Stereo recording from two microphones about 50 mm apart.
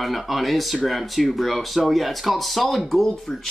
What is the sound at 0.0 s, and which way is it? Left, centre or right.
Speech, centre.